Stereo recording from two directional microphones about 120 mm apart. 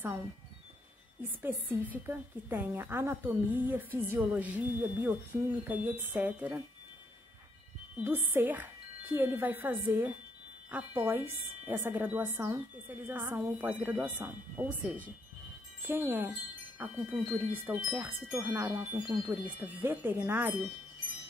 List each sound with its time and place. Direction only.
1.4 s speech: 15° right (ahead or behind)
8.0 s speech: 15° right (ahead or behind)
15.8 s speech: 20° right (ahead or behind)